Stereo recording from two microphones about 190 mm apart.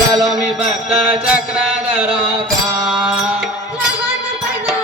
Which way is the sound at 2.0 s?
30° right (ahead or behind).